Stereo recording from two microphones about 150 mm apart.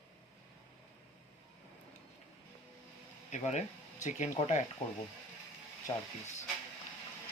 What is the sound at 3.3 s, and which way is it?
Speech, 50° left (ahead or behind).